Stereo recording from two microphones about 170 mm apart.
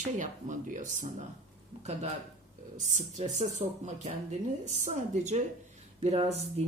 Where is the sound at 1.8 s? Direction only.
40° right (ahead or behind).